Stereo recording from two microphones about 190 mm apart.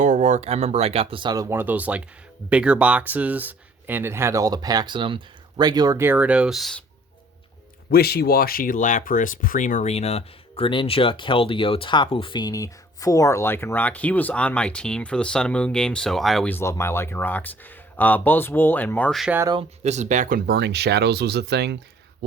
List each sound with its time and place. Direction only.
0.0 s speech: 40° right (ahead or behind); by 6.8 s centre (ahead or behind)
7.9 s speech: 55° left (ahead or behind); by 19.4 s centre (ahead or behind)
19.4 s speech: 20° right (ahead or behind)
19.8 s speech: 35° right (ahead or behind); by 21.8 s 60° right (ahead or behind)